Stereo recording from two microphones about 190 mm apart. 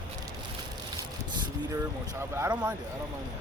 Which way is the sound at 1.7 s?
15° right (ahead or behind).